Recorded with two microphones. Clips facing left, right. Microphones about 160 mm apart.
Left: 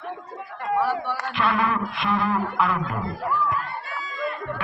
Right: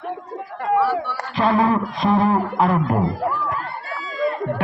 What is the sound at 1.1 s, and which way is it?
Speech, 35° right (ahead or behind).